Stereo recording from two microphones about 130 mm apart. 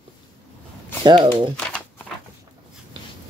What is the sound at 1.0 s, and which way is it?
Speech, 35° right (ahead or behind).